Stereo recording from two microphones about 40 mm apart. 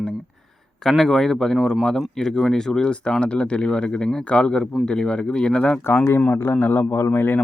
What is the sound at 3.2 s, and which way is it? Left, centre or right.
Speech, left.